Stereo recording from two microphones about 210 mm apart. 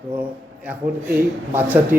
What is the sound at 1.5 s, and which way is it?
Speech, 10° right (ahead or behind).